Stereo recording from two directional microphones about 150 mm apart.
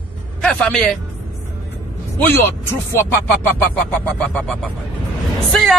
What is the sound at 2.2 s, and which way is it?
Speech, 15° left (ahead or behind).